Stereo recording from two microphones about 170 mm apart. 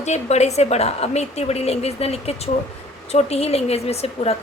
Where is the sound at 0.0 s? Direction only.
40° left (ahead or behind).